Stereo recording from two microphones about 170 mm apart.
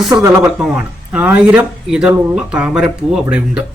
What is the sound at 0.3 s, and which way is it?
A man's voice, 20° right (ahead or behind).